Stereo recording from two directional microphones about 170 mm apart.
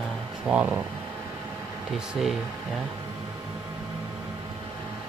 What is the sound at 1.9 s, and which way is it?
Speech, centre (ahead or behind).